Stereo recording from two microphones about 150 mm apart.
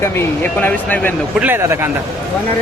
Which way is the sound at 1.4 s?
15° right (ahead or behind).